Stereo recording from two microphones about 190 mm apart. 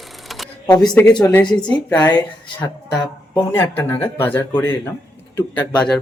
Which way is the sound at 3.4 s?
10° left (ahead or behind).